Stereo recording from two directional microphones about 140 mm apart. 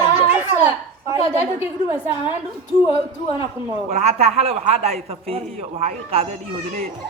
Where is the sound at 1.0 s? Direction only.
20° right (ahead or behind).